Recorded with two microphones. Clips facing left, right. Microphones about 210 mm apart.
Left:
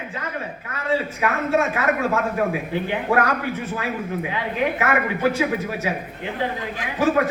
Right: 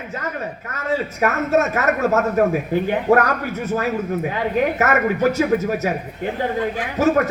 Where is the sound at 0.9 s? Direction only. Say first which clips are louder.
Right 2 dB; 40° right (ahead or behind).